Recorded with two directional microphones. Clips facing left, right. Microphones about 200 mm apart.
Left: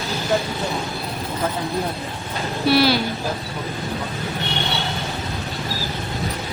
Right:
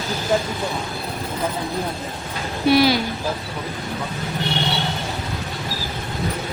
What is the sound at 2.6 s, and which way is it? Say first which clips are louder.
Speech: right 1 dB; 15° right (ahead or behind).